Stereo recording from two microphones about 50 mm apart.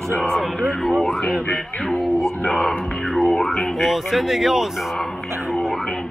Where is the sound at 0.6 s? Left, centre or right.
Centre.